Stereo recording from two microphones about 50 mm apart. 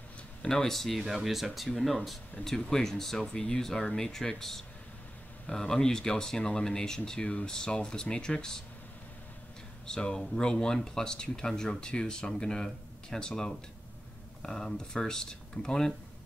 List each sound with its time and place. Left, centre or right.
0.4 s speech: centre
2.4 s speech: centre
9.8 s speech: centre